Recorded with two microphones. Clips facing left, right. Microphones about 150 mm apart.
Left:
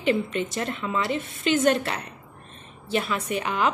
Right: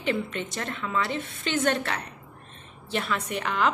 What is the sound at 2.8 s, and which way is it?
Speech, 5° left (ahead or behind).